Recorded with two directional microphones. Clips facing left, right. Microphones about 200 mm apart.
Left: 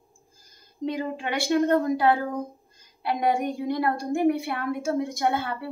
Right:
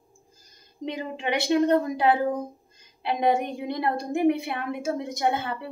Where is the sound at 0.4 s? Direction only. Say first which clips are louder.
Left 5 dB; 20° right (ahead or behind).